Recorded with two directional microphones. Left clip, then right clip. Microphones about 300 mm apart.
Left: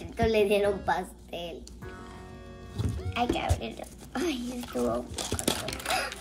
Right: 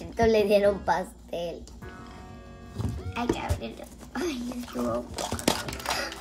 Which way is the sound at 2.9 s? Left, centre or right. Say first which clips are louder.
Left 1 dB; centre.